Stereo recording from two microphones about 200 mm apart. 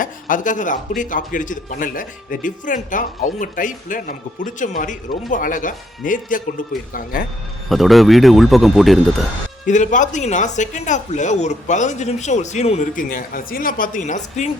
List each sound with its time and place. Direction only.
0.0 s speech: 40° left (ahead or behind)
7.7 s speech: centre (ahead or behind)
9.6 s speech: 40° left (ahead or behind)